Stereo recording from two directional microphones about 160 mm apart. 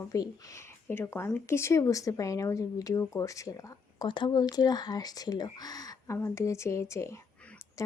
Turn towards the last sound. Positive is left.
turn(degrees=10)  # may be behind; listen again after turning